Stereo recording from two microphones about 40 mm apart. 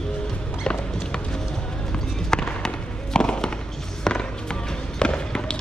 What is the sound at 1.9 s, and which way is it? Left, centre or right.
Fireworks, centre.